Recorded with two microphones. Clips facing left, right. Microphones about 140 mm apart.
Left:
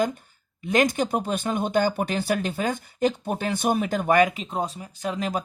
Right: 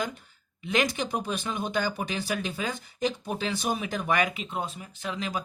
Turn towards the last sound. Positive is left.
turn(degrees=45)  # may be behind; listen again after turning